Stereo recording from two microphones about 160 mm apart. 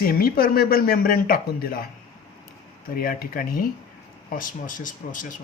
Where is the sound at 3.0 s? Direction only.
65° left (ahead or behind).